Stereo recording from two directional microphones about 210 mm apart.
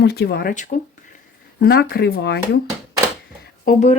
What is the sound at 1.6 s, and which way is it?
Speech, 45° left (ahead or behind).